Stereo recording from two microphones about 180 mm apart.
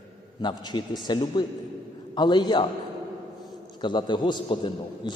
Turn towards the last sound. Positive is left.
turn(degrees=25)  # may be behind; listen again after turning